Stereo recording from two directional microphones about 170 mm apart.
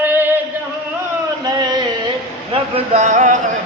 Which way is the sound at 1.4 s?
25° right (ahead or behind).